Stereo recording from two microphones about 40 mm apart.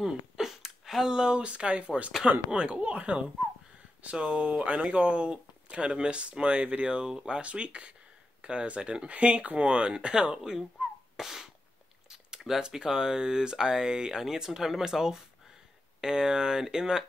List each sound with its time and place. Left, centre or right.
0.0 s speech: centre; by 10.4 s right
10.8 s beatboxing: centre
12.1 s speech: centre